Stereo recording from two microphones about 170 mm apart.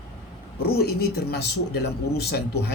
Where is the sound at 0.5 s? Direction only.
65° left (ahead or behind).